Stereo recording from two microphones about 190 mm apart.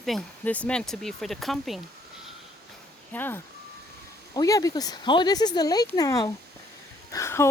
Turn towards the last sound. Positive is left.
turn(degrees=15)  # may be behind; listen again after turning